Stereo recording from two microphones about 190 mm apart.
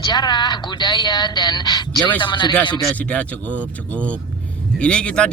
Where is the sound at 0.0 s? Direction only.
20° left (ahead or behind).